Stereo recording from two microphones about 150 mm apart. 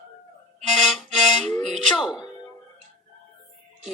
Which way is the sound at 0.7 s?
Centre (ahead or behind).